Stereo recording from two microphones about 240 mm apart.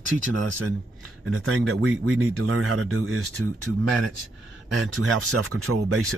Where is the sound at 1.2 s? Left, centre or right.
Right.